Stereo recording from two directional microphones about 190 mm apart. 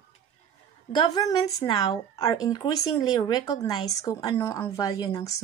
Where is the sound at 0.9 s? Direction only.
20° left (ahead or behind).